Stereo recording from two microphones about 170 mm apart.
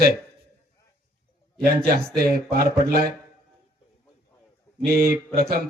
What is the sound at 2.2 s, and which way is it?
Speech, 65° right (ahead or behind).